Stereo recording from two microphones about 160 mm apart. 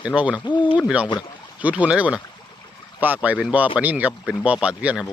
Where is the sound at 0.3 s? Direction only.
30° left (ahead or behind).